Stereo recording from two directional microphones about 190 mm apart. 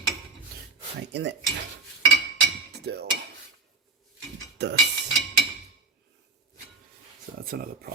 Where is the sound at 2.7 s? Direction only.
60° right (ahead or behind).